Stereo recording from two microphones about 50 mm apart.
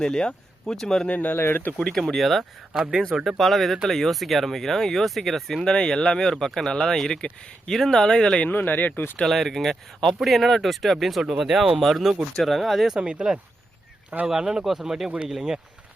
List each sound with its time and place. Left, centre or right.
0.0 s speech: centre
1.0 s speech: left
1.4 s speech: left
1.9 s speech: centre
2.1 s speech: centre
5.6 s speech: centre
8.4 s speech: left
9.2 s speech: centre
11.8 s speech: centre
13.0 s speech: centre